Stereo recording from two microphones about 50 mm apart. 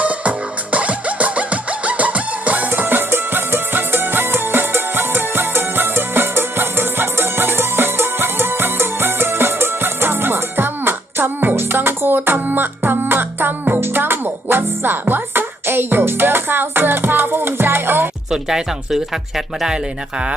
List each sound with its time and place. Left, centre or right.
0.0 s music: right
2.8 s music: right
18.3 s speech: centre